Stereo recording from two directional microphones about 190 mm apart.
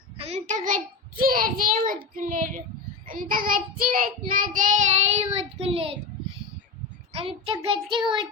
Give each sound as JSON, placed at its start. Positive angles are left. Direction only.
{"t": 0.2, "sound": "a child's voice", "side_deg": -35}
{"t": 2.1, "sound": "child singing", "side_deg": -45}
{"t": 7.1, "sound": "a child's voice", "side_deg": -30}